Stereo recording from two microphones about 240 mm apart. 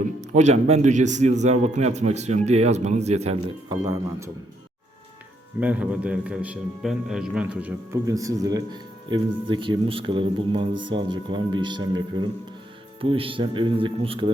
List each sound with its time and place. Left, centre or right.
0.0 s a man's voice: right
5.5 s a man's voice: centre; by 14.3 s right